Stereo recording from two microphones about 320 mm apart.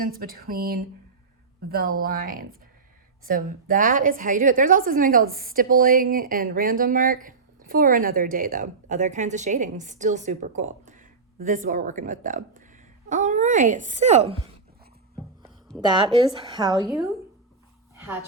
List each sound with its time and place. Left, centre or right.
0.0 s speech: right
15.8 s a woman's voice: centre